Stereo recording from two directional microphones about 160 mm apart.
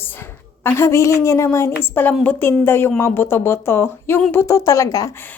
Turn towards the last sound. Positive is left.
turn(degrees=20)  # may be behind; listen again after turning